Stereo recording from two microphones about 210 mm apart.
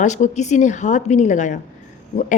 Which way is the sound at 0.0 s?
35° left (ahead or behind).